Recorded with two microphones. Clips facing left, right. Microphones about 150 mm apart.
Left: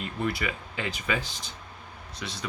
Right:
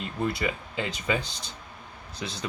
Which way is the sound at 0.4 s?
25° right (ahead or behind).